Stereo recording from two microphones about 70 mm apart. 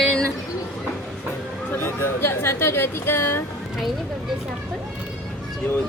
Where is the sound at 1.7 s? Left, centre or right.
Left.